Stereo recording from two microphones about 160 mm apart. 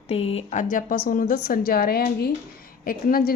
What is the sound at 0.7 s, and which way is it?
A woman's voice, 60° left (ahead or behind).